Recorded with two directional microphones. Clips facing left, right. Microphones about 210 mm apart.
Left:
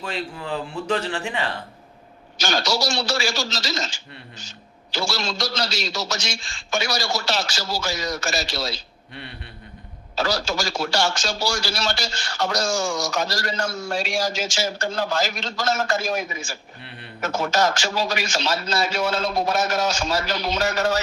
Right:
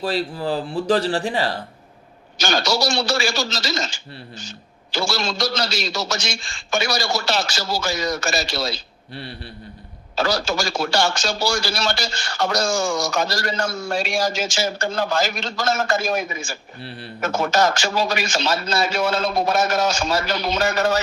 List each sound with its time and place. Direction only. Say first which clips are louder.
0.0 s speech: right 7 dB; 35° right (ahead or behind)
2.4 s speech: right 2 dB; 55° right (ahead or behind)
10.2 s speech: right 2 dB; 55° right (ahead or behind)